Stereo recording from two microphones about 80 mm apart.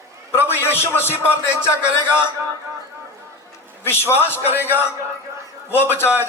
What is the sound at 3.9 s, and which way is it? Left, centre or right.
Speech, left.